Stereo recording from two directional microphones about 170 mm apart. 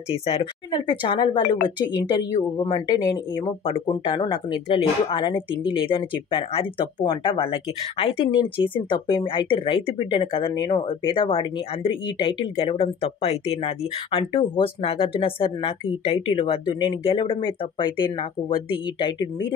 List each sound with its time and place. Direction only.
0.1 s speech: 35° left (ahead or behind)